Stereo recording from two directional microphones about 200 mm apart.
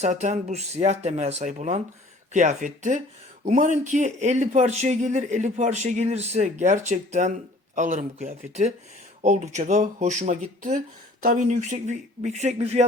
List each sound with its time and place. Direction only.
0.0 s speech: 35° right (ahead or behind)